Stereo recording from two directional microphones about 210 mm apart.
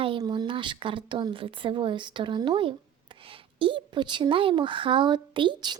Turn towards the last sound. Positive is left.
turn(degrees=-20)  # may be behind; listen again after turning